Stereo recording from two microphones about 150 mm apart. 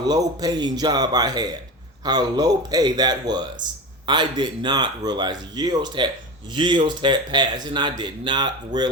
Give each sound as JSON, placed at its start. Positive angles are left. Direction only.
{"t": 0.0, "sound": "speech", "side_deg": -25}